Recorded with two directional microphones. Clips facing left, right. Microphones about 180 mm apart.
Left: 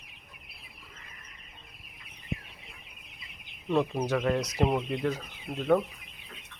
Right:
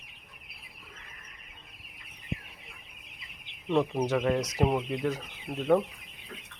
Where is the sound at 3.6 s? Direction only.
5° left (ahead or behind).